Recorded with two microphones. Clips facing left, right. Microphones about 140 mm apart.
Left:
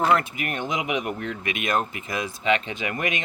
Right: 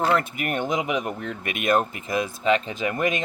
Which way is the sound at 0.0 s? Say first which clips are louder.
Left 1 dB; 40° right (ahead or behind).